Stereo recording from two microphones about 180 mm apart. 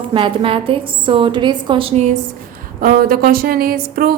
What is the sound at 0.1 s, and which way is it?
A woman's voice, 30° right (ahead or behind).